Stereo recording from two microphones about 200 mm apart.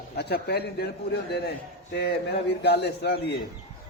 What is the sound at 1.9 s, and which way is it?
A man's voice, 55° left (ahead or behind).